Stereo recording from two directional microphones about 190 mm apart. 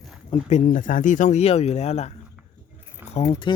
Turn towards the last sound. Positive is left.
turn(degrees=25)  # may be behind; listen again after turning